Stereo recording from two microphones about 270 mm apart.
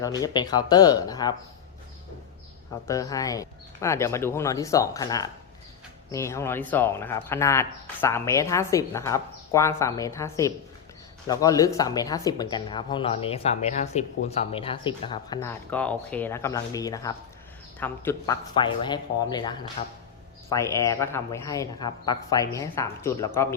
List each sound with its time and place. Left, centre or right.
0.0 s speech: centre
2.8 s speech: centre